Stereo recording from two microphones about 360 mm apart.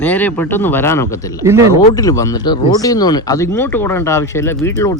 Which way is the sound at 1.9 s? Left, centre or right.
Centre.